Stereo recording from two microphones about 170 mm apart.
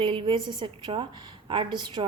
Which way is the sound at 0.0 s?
30° right (ahead or behind).